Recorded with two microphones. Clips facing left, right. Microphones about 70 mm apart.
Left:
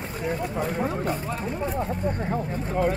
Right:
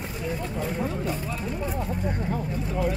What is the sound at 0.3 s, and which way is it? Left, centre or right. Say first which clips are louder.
Speech: left 3 dB; left.